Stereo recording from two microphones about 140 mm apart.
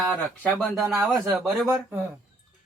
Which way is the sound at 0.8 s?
20° right (ahead or behind).